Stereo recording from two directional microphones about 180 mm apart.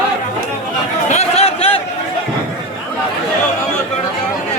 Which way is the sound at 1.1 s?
35° left (ahead or behind).